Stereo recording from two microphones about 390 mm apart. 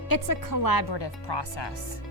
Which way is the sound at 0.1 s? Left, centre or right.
Left.